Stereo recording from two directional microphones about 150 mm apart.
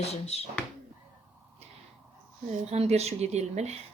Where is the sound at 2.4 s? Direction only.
45° right (ahead or behind).